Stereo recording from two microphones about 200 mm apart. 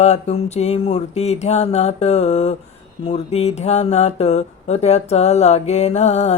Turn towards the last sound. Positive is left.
turn(degrees=35)  # may be behind; listen again after turning